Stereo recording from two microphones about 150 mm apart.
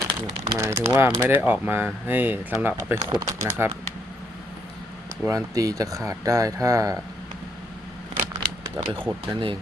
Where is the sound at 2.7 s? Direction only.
25° right (ahead or behind).